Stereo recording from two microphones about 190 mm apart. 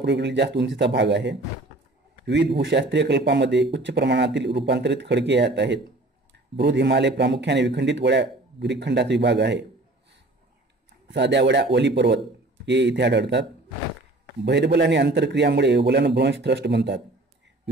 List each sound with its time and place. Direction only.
0.0 s a man's voice: 65° right (ahead or behind)
11.1 s a man's voice: 65° right (ahead or behind)